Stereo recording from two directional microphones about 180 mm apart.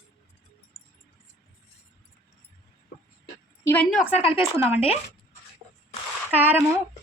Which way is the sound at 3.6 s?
10° left (ahead or behind).